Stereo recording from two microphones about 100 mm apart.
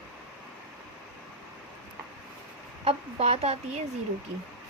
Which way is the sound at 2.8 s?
85° right.